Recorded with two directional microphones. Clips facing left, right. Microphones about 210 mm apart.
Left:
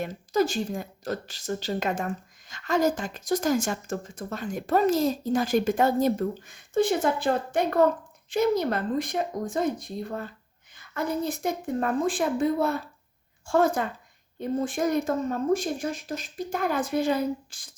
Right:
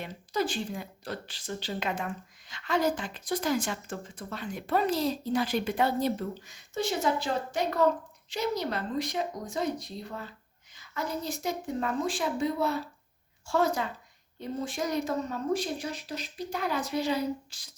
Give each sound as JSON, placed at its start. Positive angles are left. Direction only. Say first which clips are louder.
{"t": 0.0, "sound": "speech", "louder": "left 6 dB", "side_deg": 45}